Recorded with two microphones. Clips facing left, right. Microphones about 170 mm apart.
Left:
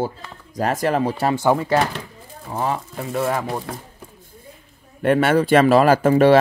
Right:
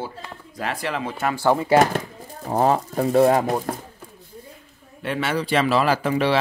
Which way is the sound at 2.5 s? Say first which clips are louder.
Right 5 dB; 40° right (ahead or behind).